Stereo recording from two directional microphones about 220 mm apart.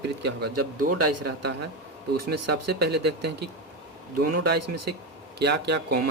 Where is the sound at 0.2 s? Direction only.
50° right (ahead or behind).